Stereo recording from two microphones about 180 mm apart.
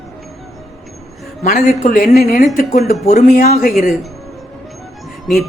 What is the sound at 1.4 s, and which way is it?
Speech, 45° left (ahead or behind).